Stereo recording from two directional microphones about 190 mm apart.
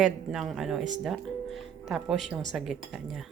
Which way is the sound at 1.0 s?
Centre (ahead or behind).